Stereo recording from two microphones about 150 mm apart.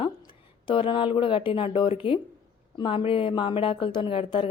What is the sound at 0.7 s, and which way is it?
Speech, 35° left (ahead or behind).